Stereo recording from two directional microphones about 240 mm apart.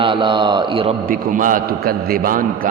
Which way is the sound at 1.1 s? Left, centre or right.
Right.